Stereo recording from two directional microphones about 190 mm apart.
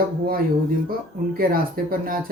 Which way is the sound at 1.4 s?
50° right (ahead or behind).